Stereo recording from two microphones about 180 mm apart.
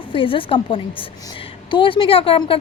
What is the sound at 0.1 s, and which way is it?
A woman's voice, 30° left (ahead or behind).